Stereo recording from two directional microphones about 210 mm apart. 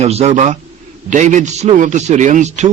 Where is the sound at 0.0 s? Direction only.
30° right (ahead or behind).